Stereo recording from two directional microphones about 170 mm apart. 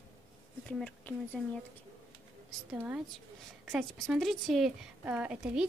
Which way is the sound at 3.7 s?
Centre (ahead or behind).